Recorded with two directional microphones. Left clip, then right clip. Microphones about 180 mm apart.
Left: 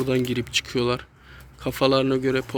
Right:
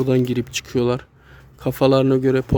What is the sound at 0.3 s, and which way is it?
Speech, 40° right (ahead or behind).